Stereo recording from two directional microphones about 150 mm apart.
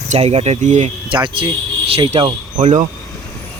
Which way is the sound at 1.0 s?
35° right (ahead or behind).